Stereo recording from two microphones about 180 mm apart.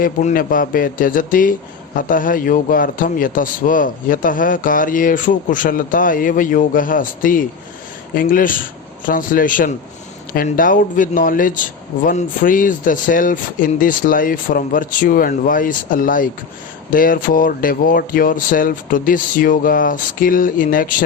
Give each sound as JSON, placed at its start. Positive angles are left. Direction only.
{"t": 0.0, "sound": "speech", "side_deg": 50}